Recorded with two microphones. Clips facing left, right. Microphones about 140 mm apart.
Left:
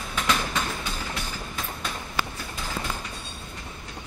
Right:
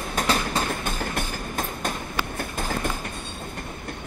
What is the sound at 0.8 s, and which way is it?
Train, 50° right (ahead or behind).